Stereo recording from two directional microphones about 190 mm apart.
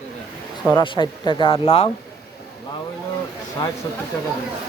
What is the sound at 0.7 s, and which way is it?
Speech, 25° left (ahead or behind).